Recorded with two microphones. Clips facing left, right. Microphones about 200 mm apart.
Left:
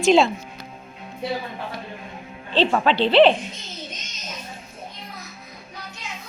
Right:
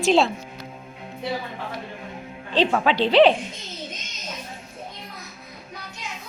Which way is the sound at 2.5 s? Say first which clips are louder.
Left 1 dB; 10° right (ahead or behind).